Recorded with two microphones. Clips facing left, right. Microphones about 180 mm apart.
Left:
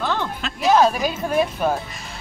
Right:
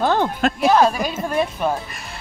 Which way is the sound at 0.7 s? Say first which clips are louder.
Left 1 dB; centre (ahead or behind).